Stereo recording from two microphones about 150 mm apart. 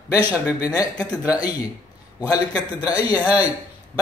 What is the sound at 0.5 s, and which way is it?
Speech, 25° left (ahead or behind).